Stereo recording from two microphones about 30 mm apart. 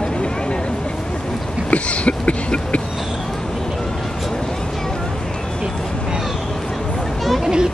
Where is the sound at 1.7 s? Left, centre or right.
Left.